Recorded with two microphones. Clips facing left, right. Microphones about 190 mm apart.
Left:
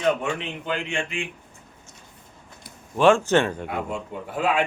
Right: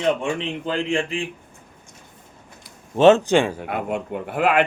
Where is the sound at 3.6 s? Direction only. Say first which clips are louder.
Right 4 dB; 60° right (ahead or behind).